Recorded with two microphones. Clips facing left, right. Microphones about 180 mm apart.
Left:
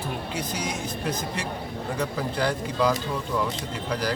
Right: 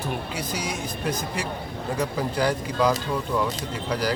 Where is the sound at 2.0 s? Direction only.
10° right (ahead or behind).